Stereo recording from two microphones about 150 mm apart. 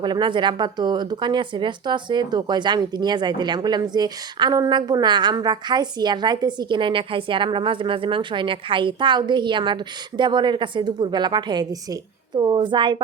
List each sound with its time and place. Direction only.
0.0 s speech: 30° right (ahead or behind)